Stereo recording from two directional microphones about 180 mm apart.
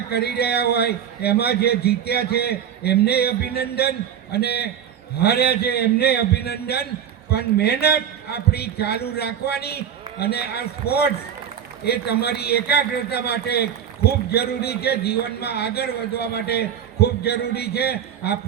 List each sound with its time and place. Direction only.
0.1 s a man's voice: 65° left (ahead or behind)